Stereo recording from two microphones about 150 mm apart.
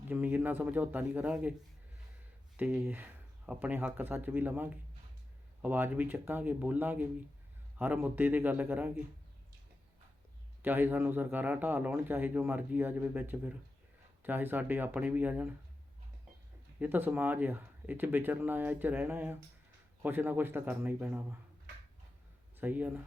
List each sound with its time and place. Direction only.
0.1 s speech: 15° right (ahead or behind)
2.6 s speech: 5° right (ahead or behind)
10.6 s speech: 15° right (ahead or behind)
16.8 s speech: 10° right (ahead or behind)
22.5 s speech: 10° right (ahead or behind)